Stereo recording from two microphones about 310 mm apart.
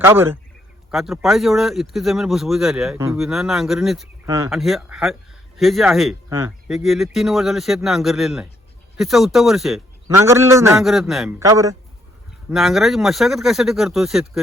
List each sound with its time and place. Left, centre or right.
0.0 s a man's voice: centre